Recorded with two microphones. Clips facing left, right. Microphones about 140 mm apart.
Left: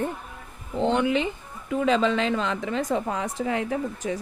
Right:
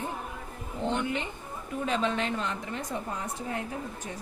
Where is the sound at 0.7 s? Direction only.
90° left.